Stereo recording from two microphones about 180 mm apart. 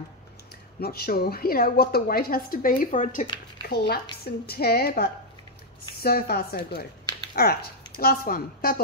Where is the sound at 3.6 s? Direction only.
60° left (ahead or behind).